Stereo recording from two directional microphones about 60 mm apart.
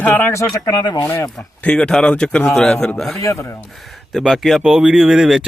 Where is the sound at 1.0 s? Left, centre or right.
Left.